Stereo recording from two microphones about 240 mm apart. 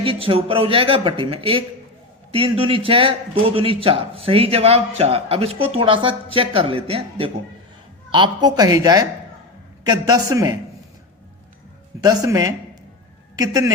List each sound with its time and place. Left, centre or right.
0.0 s a man's voice: right
11.9 s speech: centre